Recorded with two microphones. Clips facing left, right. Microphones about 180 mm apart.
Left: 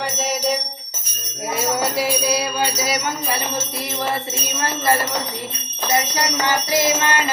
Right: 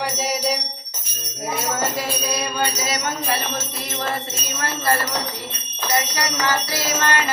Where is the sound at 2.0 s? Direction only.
10° left (ahead or behind).